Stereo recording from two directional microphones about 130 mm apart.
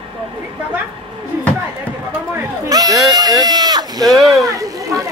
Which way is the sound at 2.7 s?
30° right (ahead or behind).